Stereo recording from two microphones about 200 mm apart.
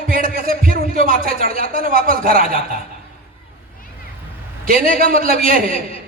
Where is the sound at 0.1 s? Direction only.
45° right (ahead or behind).